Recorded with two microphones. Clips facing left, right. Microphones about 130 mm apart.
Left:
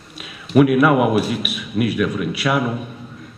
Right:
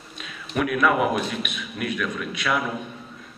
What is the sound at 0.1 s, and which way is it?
A man's voice, 5° left (ahead or behind).